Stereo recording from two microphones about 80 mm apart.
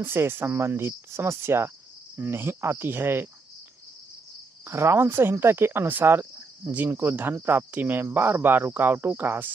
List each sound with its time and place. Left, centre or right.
0.0 s speech: right
4.6 s speech: right